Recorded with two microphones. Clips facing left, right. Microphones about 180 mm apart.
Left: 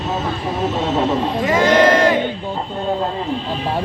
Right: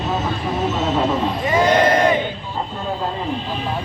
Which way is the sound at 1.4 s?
90° left.